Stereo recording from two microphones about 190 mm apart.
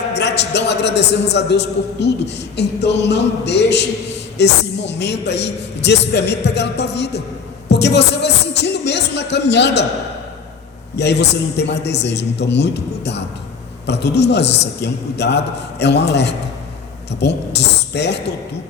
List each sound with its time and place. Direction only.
0.1 s a man's voice: 60° left (ahead or behind)
10.9 s a man's voice: 60° left (ahead or behind)